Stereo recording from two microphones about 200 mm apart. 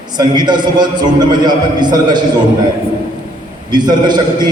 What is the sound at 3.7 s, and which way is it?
Speech, 20° right (ahead or behind).